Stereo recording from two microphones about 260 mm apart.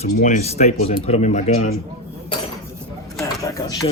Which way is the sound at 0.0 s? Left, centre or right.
Left.